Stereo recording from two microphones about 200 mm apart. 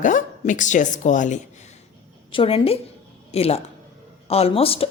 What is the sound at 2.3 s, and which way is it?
Speech, 25° left (ahead or behind).